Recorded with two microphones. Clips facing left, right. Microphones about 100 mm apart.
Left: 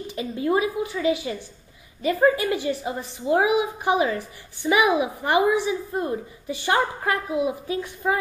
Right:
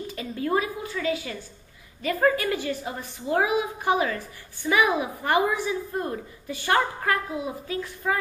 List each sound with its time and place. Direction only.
0.4 s a woman's voice: 15° left (ahead or behind)